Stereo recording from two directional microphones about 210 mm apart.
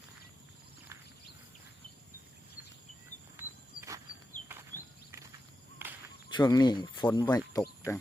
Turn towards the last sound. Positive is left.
turn(degrees=15)  # may be behind; listen again after turning